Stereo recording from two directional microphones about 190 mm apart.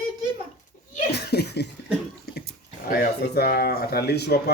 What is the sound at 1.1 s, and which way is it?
Laughter, 60° left (ahead or behind).